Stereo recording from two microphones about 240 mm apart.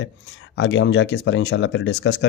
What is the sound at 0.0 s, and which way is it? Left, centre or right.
Speech, left.